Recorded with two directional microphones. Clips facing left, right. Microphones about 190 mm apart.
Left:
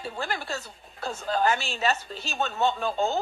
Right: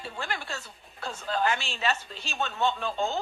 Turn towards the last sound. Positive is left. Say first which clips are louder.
# left 3 dB
turn(degrees=40)  # may be behind; listen again after turning